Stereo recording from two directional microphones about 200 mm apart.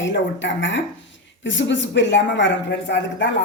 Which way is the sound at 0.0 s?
65° left (ahead or behind).